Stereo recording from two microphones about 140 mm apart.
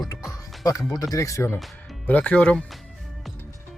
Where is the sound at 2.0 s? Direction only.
10° left (ahead or behind).